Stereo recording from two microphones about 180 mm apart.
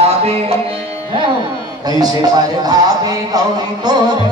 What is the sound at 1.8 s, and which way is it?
Speech, 20° right (ahead or behind).